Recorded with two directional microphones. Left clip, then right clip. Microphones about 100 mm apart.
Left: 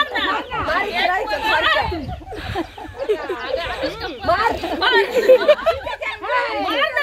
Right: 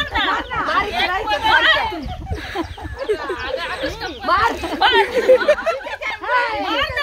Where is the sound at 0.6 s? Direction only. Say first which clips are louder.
Even; 20° right (ahead or behind).